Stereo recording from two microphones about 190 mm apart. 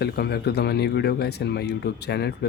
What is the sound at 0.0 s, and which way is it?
Speech, 55° left (ahead or behind).